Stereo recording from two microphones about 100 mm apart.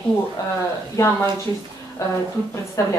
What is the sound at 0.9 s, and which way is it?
Speech, 30° left (ahead or behind).